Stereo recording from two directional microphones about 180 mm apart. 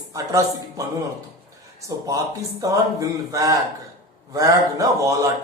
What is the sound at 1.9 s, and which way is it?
A man's voice, 15° right (ahead or behind).